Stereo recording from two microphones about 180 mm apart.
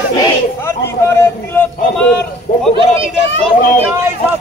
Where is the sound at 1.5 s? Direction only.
5° left (ahead or behind).